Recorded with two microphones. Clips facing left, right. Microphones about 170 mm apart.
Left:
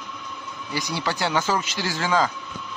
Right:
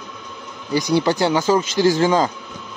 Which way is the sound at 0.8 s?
20° right (ahead or behind).